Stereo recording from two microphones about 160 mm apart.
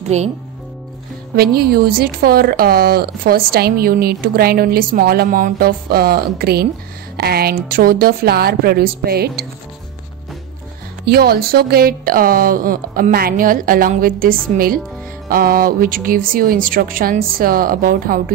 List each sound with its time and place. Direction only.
0.1 s speech: 45° right (ahead or behind)
1.3 s a woman's voice: 75° right (ahead or behind)
11.1 s speech: 75° right (ahead or behind)
14.5 s speech: 50° right (ahead or behind)
15.2 s speech: 65° right (ahead or behind)